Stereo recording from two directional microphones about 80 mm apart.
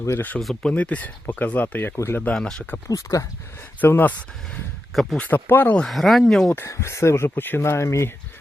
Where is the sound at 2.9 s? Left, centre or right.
Left; by 4.3 s centre.